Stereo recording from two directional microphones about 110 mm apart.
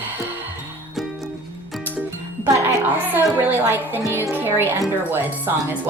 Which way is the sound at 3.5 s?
20° right (ahead or behind).